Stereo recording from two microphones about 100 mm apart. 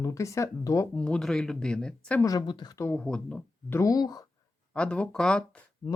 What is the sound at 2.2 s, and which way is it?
Speech, 35° left (ahead or behind).